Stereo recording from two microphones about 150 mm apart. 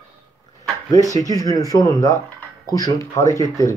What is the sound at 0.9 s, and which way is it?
Speech, 25° left (ahead or behind).